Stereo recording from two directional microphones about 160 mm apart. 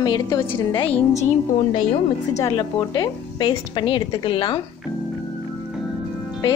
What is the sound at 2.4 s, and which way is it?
A woman's voice, 20° left (ahead or behind).